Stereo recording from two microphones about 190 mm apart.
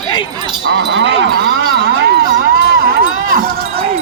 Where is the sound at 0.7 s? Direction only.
65° right (ahead or behind); by 3.5 s 50° right (ahead or behind).